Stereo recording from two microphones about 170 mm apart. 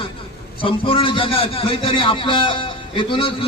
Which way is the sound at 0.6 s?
30° left (ahead or behind).